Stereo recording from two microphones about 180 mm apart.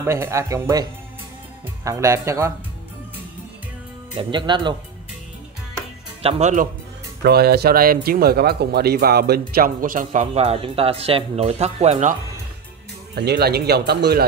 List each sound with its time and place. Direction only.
0.0 s speech: 15° right (ahead or behind)
1.9 s speech: 15° right (ahead or behind)
4.2 s speech: 25° right (ahead or behind)
6.2 s speech: 35° right (ahead or behind)
7.2 s speech: 60° right (ahead or behind); by 12.2 s 40° right (ahead or behind)
13.1 s speech: 65° right (ahead or behind)